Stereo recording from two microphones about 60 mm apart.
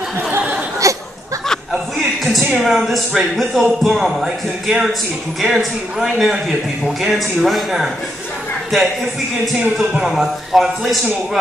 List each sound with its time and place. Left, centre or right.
0.8 s a sound: right
2.2 s speech: centre
10.0 s speech: centre